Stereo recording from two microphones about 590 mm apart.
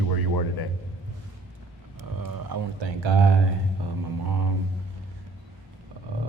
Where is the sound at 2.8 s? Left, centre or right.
Right.